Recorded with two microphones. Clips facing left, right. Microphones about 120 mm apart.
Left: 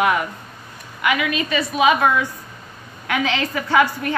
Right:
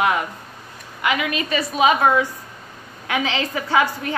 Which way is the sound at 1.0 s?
35° right (ahead or behind).